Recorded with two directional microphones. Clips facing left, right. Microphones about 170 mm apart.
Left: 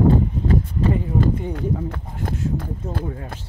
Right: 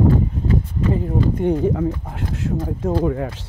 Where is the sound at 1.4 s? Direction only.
90° right.